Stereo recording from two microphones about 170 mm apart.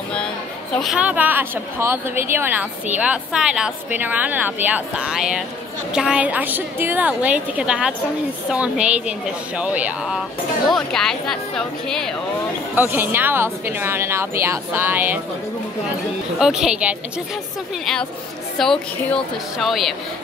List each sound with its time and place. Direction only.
0.7 s a woman's voice: 5° right (ahead or behind)
12.7 s a woman's voice: 10° right (ahead or behind)
16.3 s speech: 5° right (ahead or behind)
18.6 s speech: 5° left (ahead or behind)